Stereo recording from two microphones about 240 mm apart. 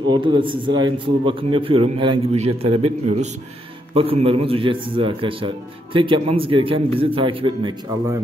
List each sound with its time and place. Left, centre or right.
0.1 s a man's voice: centre